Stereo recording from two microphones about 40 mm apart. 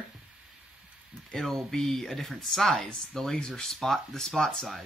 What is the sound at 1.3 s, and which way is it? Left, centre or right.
Speech, centre.